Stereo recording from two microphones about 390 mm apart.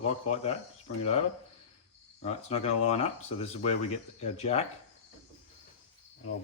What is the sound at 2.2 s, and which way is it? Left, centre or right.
Speech, centre.